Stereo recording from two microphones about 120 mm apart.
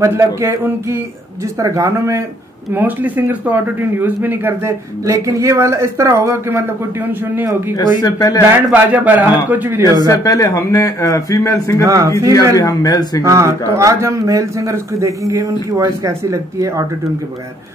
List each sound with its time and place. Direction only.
0.0 s a man's voice: 25° right (ahead or behind)
7.7 s speech: 30° left (ahead or behind)
8.7 s a man's voice: 15° right (ahead or behind)
9.9 s a man's voice: 30° left (ahead or behind)
11.8 s a man's voice: 30° right (ahead or behind)
12.5 s speech: 30° left (ahead or behind)
13.2 s a man's voice: 25° right (ahead or behind)